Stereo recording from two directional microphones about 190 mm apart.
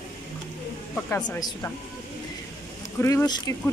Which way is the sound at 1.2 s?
20° left (ahead or behind).